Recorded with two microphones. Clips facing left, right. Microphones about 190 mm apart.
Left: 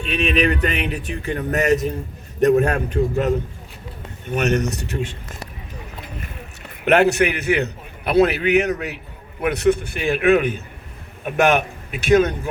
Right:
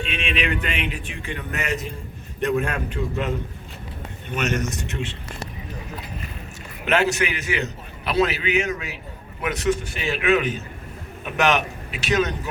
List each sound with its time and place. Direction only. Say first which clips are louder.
0.0 s speech: left 7 dB; 40° left (ahead or behind)
6.8 s a man's voice: left 6 dB; 60° left (ahead or behind)